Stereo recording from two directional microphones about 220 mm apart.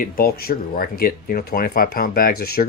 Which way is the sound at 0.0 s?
40° left (ahead or behind).